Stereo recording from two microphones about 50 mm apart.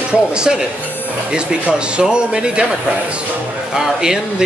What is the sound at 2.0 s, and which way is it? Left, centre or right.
Speech, centre.